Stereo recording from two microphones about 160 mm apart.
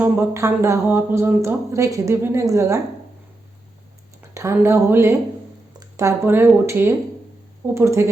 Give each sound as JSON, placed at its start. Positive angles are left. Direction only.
{"t": 0.0, "sound": "speech", "side_deg": -15}
{"t": 4.4, "sound": "speech", "side_deg": -15}